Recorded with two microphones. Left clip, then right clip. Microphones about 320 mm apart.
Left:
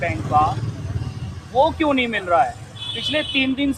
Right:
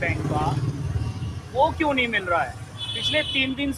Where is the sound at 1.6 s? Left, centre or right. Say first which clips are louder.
Left 2 dB; left.